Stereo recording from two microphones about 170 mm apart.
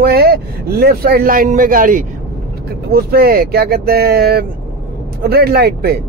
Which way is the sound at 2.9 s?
65° right (ahead or behind).